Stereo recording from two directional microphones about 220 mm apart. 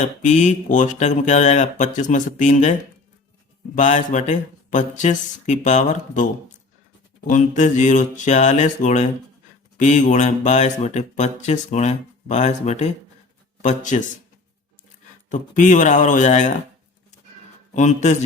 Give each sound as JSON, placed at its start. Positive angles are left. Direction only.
{"t": 0.0, "sound": "speech", "side_deg": 35}
{"t": 3.8, "sound": "speech", "side_deg": 35}
{"t": 7.3, "sound": "speech", "side_deg": 35}
{"t": 15.3, "sound": "speech", "side_deg": 35}
{"t": 17.7, "sound": "speech", "side_deg": 30}